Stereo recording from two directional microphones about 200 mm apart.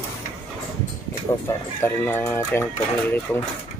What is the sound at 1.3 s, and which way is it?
Speech, 15° left (ahead or behind).